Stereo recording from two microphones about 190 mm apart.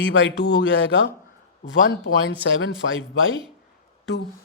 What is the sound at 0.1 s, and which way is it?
Speech, 70° left (ahead or behind).